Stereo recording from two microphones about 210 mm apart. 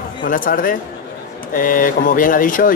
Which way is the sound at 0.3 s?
40° left (ahead or behind).